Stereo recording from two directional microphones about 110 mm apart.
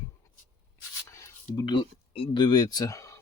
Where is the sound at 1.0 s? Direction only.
30° left (ahead or behind).